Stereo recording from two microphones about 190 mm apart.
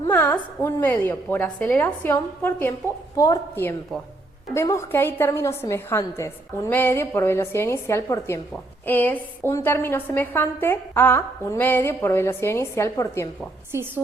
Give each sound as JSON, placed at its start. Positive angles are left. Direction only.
{"t": 0.1, "sound": "a woman's voice", "side_deg": 10}